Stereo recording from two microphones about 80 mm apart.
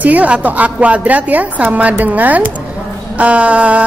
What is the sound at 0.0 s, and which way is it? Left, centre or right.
A woman's voice, centre.